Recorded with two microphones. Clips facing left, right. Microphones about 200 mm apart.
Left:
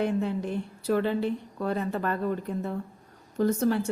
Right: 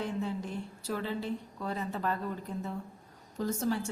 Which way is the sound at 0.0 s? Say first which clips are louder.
Left 7 dB; 65° left (ahead or behind).